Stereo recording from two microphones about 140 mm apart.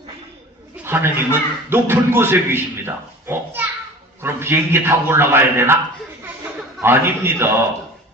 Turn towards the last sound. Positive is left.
turn(degrees=-15)  # may be behind; listen again after turning